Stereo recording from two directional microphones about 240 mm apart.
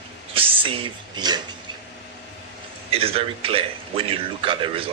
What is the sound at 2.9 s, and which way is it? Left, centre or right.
A man's voice, right.